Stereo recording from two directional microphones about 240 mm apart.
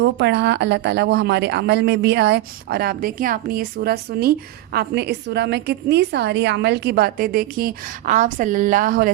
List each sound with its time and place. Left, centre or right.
0.0 s a woman's voice: right